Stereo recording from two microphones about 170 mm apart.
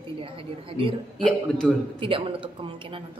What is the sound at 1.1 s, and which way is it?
Speech, 5° left (ahead or behind).